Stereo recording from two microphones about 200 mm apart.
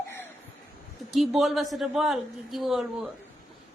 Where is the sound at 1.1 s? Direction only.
Centre (ahead or behind).